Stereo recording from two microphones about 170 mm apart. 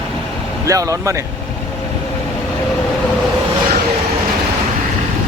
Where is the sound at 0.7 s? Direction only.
20° right (ahead or behind).